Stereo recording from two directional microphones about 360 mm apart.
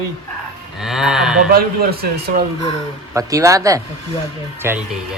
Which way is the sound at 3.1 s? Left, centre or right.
Centre.